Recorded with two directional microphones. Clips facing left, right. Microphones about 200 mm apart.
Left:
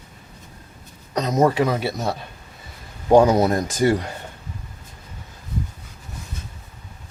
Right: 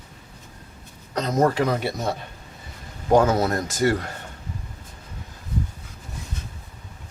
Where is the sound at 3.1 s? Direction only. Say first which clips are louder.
Left 4 dB; 15° left (ahead or behind).